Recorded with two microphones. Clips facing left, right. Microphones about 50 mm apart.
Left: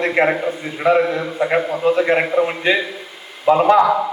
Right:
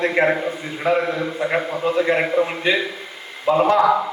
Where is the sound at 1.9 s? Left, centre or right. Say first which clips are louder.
Left 2 dB; centre.